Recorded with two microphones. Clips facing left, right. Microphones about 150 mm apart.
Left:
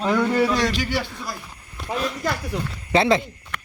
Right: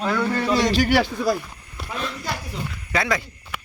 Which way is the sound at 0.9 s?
85° right.